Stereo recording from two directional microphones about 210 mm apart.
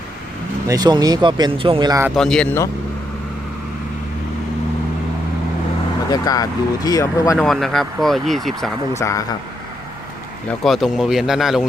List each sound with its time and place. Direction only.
0.7 s speech: 20° right (ahead or behind)
2.1 s speech: 5° left (ahead or behind)
6.1 s speech: 15° left (ahead or behind)
7.3 s speech: centre (ahead or behind)
9.0 s speech: 15° left (ahead or behind)
10.6 s speech: centre (ahead or behind)